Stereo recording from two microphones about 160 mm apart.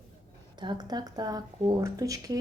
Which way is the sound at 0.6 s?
25° right (ahead or behind).